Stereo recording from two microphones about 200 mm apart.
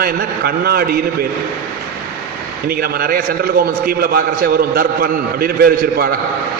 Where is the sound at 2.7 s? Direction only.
50° right (ahead or behind).